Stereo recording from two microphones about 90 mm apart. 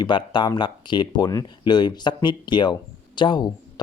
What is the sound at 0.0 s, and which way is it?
Speech, 55° left (ahead or behind).